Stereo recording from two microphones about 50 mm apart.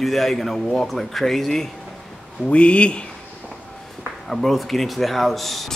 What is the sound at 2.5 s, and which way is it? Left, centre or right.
Speech, left.